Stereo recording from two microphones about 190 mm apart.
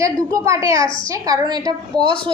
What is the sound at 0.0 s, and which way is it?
A woman's voice, 15° right (ahead or behind).